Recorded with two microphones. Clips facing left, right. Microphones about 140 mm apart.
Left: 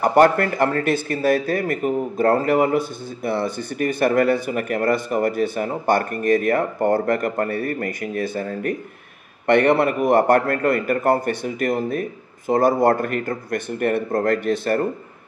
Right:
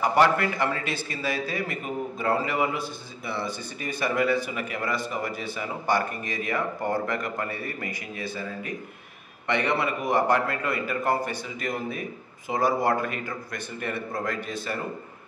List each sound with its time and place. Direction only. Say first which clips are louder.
0.0 s a man's voice: left 6 dB; 50° left (ahead or behind)